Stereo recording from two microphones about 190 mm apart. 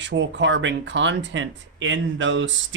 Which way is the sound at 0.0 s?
70° right (ahead or behind).